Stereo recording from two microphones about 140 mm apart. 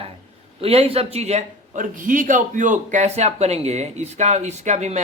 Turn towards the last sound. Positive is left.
turn(degrees=-55)  # may be behind; listen again after turning